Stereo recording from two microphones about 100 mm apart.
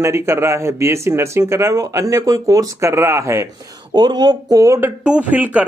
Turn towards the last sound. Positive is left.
turn(degrees=-15)  # may be behind; listen again after turning